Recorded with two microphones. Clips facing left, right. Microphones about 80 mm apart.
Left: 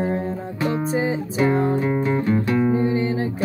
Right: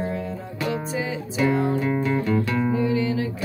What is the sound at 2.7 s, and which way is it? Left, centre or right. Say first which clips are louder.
Music: left 2 dB; left.